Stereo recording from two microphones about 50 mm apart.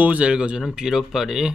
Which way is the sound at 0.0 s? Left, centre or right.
Right.